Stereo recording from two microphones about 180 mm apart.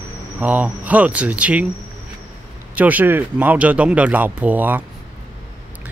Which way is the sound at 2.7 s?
10° right (ahead or behind).